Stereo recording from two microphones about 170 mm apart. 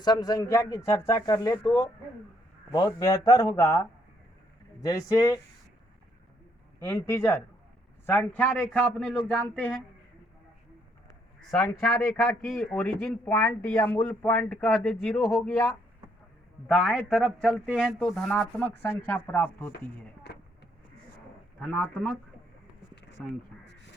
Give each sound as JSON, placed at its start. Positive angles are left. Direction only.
{"t": 0.0, "sound": "speech", "side_deg": 25}
{"t": 6.8, "sound": "speech", "side_deg": 15}
{"t": 11.5, "sound": "a man's voice", "side_deg": 5}
{"t": 20.3, "sound": "vehicle", "side_deg": 80}
{"t": 21.6, "sound": "a man's voice", "side_deg": 5}
{"t": 23.2, "sound": "a man's voice", "side_deg": 5}